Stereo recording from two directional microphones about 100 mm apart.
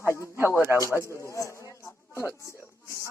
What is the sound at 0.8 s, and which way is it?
Speech, 30° left (ahead or behind).